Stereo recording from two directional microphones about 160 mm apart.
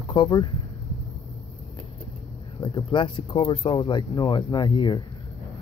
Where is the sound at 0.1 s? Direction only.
30° left (ahead or behind).